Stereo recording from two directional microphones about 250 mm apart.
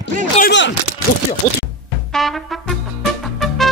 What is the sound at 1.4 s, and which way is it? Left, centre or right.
Speech, left.